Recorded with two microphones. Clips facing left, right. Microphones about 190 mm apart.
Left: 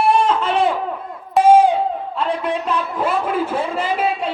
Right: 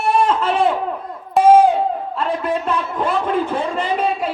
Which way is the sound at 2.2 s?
Centre (ahead or behind).